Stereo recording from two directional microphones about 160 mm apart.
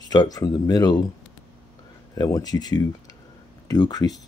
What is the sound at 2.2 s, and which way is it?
Speech, 25° left (ahead or behind).